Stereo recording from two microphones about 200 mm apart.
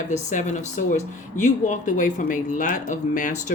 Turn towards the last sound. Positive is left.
turn(degrees=40)  # may be behind; listen again after turning